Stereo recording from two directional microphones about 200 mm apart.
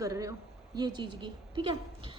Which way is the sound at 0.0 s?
15° right (ahead or behind).